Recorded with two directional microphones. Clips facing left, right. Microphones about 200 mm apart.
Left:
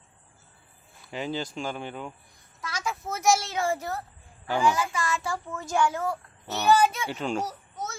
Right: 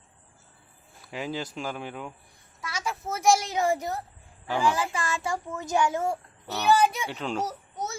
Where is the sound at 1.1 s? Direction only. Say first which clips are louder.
Left 1 dB; 5° right (ahead or behind).